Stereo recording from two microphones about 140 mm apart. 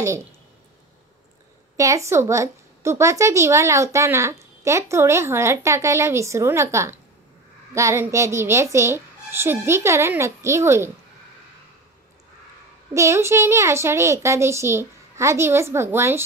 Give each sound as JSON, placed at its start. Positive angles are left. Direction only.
{"t": 1.8, "sound": "a woman's voice", "side_deg": -20}
{"t": 12.9, "sound": "a woman's voice", "side_deg": -20}